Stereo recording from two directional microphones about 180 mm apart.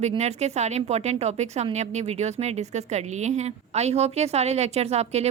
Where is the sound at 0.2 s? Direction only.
40° right (ahead or behind).